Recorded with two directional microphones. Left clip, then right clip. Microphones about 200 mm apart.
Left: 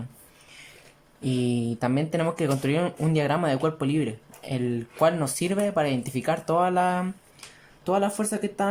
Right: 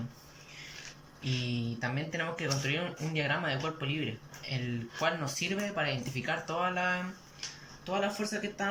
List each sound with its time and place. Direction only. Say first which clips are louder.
1.2 s speech: left 9 dB; 40° left (ahead or behind)